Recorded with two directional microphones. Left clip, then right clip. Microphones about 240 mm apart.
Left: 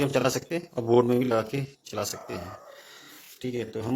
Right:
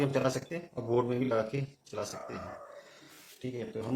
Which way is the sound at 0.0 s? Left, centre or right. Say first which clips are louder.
Left 5 dB; left.